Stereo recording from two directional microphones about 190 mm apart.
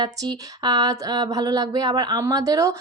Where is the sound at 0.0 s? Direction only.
20° right (ahead or behind).